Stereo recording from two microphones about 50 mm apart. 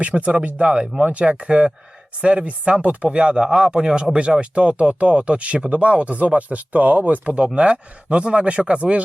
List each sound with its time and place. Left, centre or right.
0.0 s speech: right